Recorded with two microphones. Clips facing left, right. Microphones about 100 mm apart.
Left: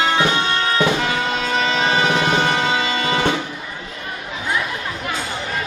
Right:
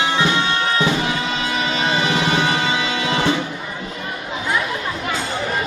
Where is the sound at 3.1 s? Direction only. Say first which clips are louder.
Right 1 dB; 50° left (ahead or behind).